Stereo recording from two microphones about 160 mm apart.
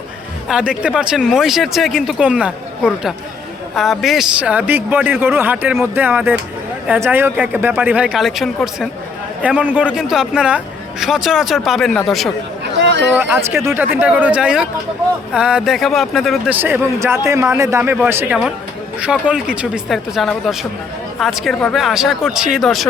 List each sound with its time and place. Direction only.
0.4 s a man's voice: 5° right (ahead or behind)
12.7 s chatter: 90° right
13.1 s a man's voice: 15° right (ahead or behind)
16.6 s a man's voice: 10° right (ahead or behind)